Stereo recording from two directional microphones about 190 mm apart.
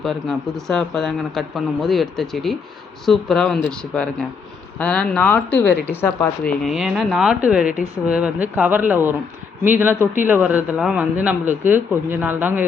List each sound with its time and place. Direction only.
0.0 s speech: centre (ahead or behind)
6.7 s speech: centre (ahead or behind)